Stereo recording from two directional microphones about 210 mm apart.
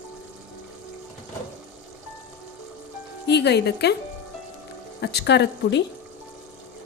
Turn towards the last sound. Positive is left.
turn(degrees=55)  # may be behind; listen again after turning